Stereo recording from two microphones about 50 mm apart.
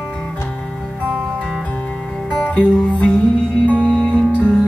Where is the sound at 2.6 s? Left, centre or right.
Left.